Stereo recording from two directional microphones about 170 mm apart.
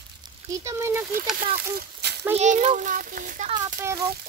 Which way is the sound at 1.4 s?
70° right (ahead or behind).